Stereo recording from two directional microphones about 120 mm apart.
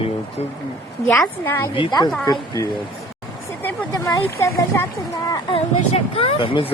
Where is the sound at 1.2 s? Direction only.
20° left (ahead or behind).